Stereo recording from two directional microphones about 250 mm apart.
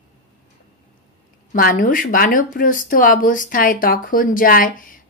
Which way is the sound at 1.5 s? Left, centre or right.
Left.